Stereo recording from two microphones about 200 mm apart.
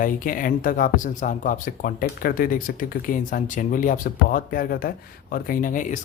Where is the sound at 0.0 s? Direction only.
45° left (ahead or behind).